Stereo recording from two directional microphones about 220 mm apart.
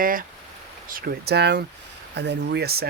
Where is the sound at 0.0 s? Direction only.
40° right (ahead or behind).